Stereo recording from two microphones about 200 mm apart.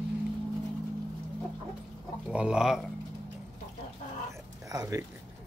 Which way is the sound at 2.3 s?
5° right (ahead or behind).